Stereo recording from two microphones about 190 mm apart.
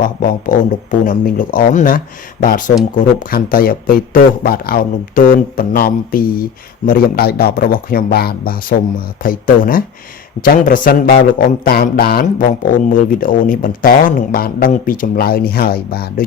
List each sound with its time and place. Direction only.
0.0 s speech: 45° left (ahead or behind)